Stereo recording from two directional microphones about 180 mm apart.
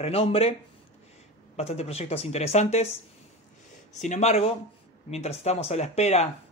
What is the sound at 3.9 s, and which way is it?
Speech, 40° left (ahead or behind).